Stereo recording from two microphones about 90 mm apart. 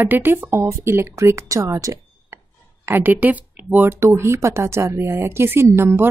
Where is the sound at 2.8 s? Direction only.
20° right (ahead or behind).